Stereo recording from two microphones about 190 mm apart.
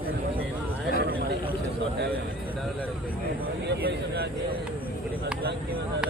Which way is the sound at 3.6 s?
55° right (ahead or behind).